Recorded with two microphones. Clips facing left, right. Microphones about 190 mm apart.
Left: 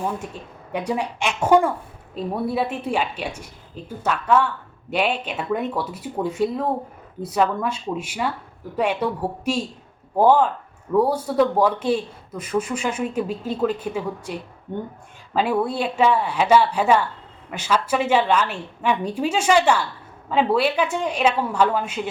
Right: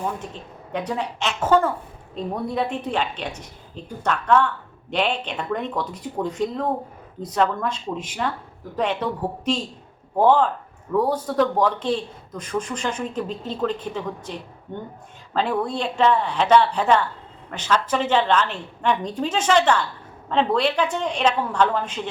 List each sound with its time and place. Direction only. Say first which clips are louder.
0.2 s a woman's voice: left 1 dB; 10° left (ahead or behind)